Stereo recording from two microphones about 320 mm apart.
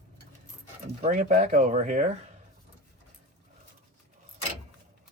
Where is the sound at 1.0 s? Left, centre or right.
Right.